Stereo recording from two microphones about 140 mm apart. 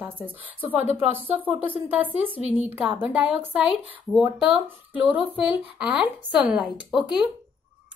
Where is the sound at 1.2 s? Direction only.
10° right (ahead or behind).